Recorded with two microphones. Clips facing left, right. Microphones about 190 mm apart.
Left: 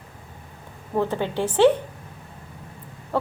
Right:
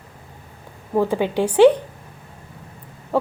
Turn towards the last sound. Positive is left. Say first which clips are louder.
# right 4 dB
turn(degrees=-15)  # may be behind; listen again after turning